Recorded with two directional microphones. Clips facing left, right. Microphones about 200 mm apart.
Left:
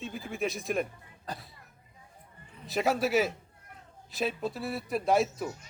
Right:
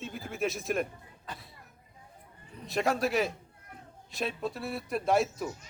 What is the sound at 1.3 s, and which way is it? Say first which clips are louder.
Speech: left 4 dB; 40° left (ahead or behind).